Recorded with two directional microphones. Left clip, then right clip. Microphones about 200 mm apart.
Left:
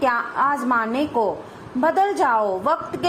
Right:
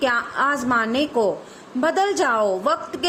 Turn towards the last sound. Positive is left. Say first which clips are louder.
# even
turn(degrees=-20)  # may be behind; listen again after turning